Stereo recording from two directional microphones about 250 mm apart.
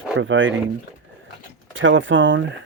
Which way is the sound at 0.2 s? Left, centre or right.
Right.